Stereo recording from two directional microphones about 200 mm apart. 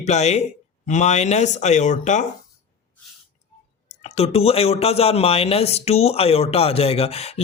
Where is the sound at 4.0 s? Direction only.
30° left (ahead or behind).